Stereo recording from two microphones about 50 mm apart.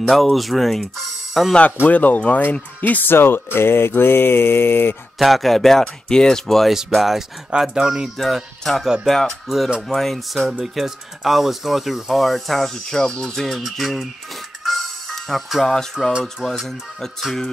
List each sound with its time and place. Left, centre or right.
0.1 s speech: centre
1.9 s speech: left
2.8 s a sound: left
5.2 s speech: centre
6.9 s speech: centre
7.5 s speech: centre
8.2 s speech: centre
12.7 s speech: centre
15.0 s speech: centre
16.1 s speech: right
16.4 s speech: centre